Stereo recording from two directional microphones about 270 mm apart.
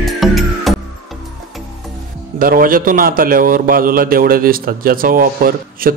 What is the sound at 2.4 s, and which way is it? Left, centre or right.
A man's voice, right.